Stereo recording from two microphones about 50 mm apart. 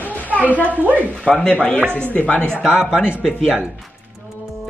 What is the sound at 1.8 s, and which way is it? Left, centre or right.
Speech, right.